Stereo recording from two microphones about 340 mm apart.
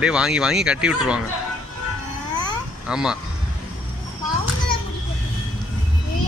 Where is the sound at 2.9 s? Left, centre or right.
Centre.